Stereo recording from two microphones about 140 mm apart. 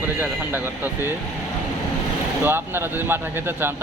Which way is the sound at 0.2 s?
15° right (ahead or behind).